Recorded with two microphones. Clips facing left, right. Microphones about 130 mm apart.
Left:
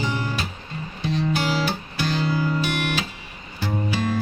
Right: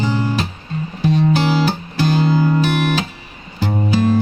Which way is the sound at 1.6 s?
40° right (ahead or behind).